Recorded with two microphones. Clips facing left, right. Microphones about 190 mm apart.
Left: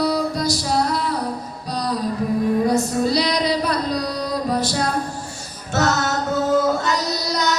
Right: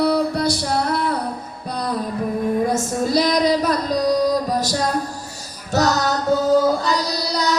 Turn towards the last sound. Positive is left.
turn(degrees=-35)  # may be behind; listen again after turning